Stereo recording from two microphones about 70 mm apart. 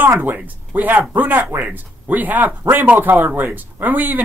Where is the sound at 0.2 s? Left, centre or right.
Right.